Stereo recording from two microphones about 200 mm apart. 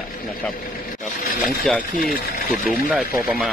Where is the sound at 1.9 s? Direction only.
45° left (ahead or behind).